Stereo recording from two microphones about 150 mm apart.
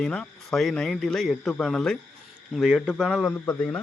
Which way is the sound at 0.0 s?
5° left (ahead or behind).